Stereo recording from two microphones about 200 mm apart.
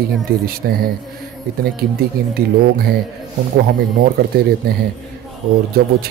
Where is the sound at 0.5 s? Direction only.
50° right (ahead or behind).